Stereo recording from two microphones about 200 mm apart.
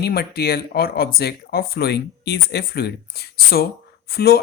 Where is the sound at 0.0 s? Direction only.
50° left (ahead or behind).